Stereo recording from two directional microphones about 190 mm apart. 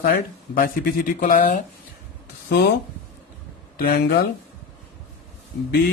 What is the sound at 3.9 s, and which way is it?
Speech, 55° left (ahead or behind).